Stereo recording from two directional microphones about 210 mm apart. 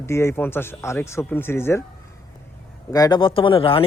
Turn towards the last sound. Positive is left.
turn(degrees=25)  # may be behind; listen again after turning